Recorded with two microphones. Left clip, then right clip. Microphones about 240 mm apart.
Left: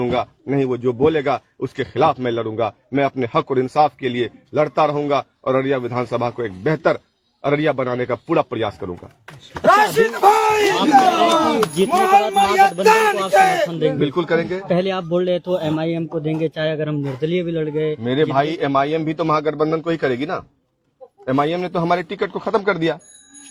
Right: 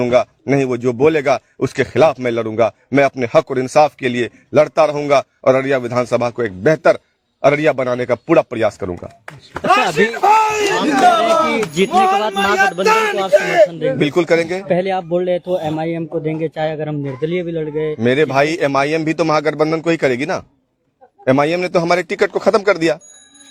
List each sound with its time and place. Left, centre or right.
0.0 s speech: right
10.8 s speech: centre
11.7 s music: right
12.9 s speech: centre
13.7 s speech: centre
14.0 s speech: right
14.7 s speech: centre
18.0 s speech: right